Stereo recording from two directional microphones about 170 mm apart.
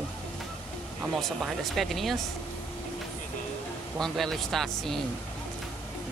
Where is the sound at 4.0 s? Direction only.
Centre (ahead or behind).